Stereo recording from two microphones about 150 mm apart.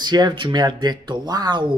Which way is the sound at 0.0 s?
30° right (ahead or behind).